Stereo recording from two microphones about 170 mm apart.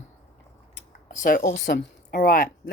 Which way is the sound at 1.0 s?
55° left (ahead or behind).